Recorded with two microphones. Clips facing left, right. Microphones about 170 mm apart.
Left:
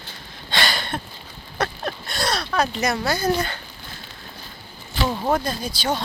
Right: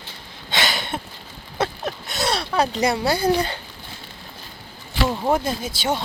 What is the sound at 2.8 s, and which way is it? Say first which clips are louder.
Speech: right 3 dB; 30° right (ahead or behind).